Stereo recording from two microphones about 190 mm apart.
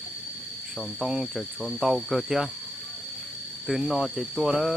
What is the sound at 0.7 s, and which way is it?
Cricket, centre (ahead or behind).